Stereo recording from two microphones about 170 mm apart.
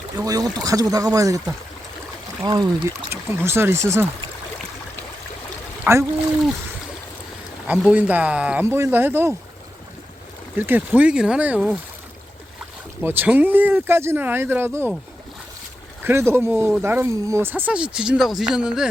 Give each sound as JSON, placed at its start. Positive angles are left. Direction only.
{"t": 0.2, "sound": "speech", "side_deg": -20}
{"t": 5.8, "sound": "speech", "side_deg": -15}
{"t": 7.7, "sound": "speech", "side_deg": -10}
{"t": 10.6, "sound": "speech", "side_deg": -10}
{"t": 13.0, "sound": "speech", "side_deg": -10}
{"t": 16.0, "sound": "speech", "side_deg": -15}